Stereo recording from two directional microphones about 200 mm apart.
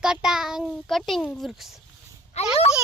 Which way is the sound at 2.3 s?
35° left (ahead or behind).